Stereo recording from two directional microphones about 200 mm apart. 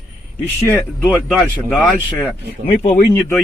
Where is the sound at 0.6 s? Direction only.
10° left (ahead or behind).